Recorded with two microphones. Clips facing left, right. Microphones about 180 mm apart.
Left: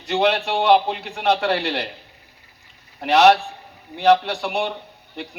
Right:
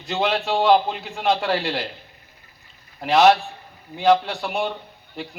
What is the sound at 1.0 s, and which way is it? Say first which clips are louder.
Speech: left 2 dB; 70° left (ahead or behind).